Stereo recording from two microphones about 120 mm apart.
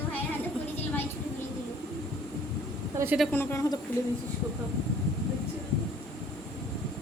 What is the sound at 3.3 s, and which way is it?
Speech, 20° left (ahead or behind).